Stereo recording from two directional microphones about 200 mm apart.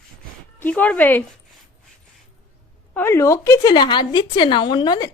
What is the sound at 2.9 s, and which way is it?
A woman's voice, 10° left (ahead or behind).